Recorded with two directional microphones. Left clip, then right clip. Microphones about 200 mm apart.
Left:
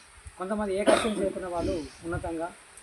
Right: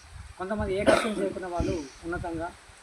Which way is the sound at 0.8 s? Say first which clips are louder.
Right 1 dB; 15° right (ahead or behind).